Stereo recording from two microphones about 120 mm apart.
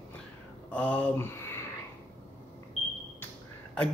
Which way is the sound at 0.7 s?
10° left (ahead or behind).